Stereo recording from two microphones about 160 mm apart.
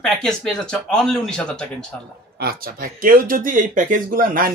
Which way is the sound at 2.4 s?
70° right (ahead or behind).